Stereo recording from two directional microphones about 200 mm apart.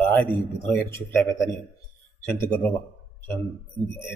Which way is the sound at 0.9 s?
10° left (ahead or behind).